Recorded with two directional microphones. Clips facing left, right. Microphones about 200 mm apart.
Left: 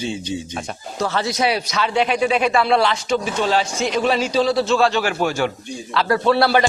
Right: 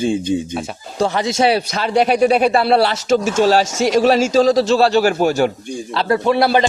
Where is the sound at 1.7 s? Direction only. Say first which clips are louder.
Right 4 dB; 40° right (ahead or behind).